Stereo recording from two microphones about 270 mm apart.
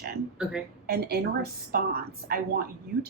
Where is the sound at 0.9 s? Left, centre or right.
Right.